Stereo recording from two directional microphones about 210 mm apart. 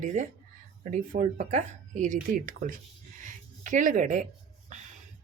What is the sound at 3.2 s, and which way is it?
Writing, 40° right (ahead or behind).